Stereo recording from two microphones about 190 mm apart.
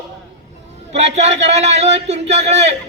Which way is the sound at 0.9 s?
35° right (ahead or behind).